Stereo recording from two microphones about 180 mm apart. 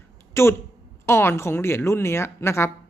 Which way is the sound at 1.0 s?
15° left (ahead or behind).